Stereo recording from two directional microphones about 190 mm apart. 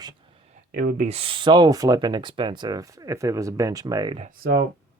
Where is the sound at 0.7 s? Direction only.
45° right (ahead or behind); by 4.2 s 20° right (ahead or behind).